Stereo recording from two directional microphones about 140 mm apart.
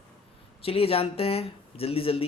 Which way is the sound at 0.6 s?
45° left (ahead or behind).